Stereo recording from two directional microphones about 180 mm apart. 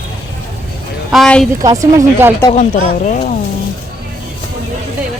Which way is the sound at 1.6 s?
20° right (ahead or behind).